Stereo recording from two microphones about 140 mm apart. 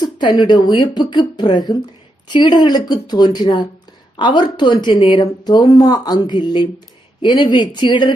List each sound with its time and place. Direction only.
0.0 s speech: 35° left (ahead or behind)